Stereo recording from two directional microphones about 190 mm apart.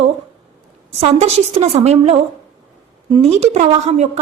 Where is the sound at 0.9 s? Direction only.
35° right (ahead or behind).